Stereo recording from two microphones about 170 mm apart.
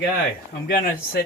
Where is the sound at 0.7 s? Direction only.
60° left (ahead or behind).